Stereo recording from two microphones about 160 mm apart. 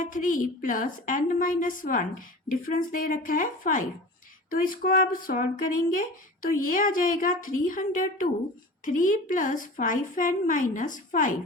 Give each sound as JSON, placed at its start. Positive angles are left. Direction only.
{"t": 0.0, "sound": "a woman's voice", "side_deg": 55}